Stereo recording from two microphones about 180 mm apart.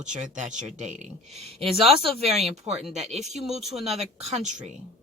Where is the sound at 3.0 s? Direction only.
40° right (ahead or behind).